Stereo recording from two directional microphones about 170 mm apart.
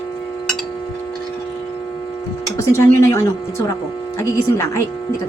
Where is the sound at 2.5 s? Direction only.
15° left (ahead or behind).